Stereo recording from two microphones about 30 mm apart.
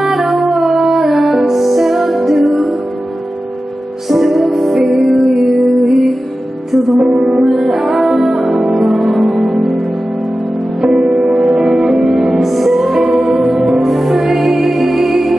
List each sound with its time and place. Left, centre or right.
0.1 s music: centre
4.1 s music: centre
11.7 s music: centre